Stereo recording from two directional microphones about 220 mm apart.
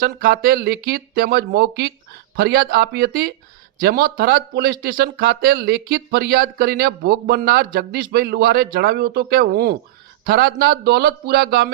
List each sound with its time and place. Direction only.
0.0 s speech: 40° right (ahead or behind)